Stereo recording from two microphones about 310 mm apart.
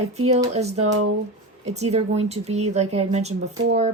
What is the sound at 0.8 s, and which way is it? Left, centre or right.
Speech, right.